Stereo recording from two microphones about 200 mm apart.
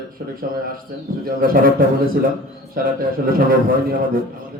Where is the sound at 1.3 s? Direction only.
45° right (ahead or behind).